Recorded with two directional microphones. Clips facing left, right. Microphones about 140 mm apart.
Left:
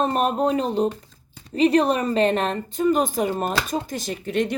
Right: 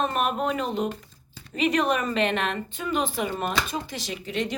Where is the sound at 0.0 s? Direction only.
35° left (ahead or behind).